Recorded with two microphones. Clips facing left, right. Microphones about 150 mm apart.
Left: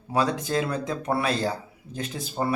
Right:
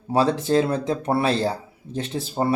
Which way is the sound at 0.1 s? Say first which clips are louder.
Right 5 dB; 30° right (ahead or behind).